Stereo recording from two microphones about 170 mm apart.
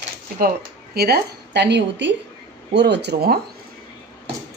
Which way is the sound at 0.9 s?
70° right (ahead or behind).